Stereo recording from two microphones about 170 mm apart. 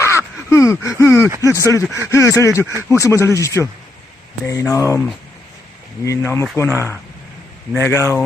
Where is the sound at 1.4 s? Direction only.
20° left (ahead or behind).